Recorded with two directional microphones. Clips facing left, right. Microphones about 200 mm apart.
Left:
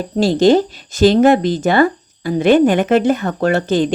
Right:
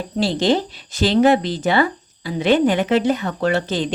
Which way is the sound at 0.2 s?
45° left (ahead or behind).